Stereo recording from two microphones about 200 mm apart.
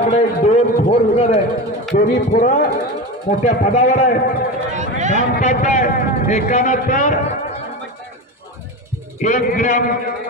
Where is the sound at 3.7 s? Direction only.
35° left (ahead or behind).